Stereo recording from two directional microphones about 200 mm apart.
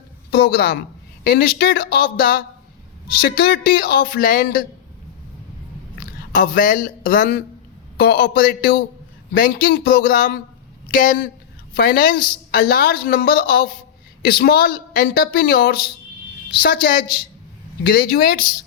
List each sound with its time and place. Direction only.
0.3 s a woman's voice: 55° left (ahead or behind)
6.0 s a woman's voice: 45° left (ahead or behind)